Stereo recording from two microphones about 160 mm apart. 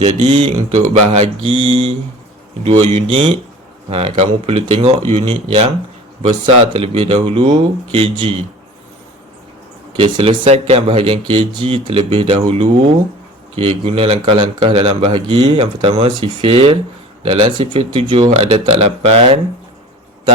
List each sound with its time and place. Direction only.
0.0 s speech: 40° right (ahead or behind)
10.0 s speech: 35° right (ahead or behind)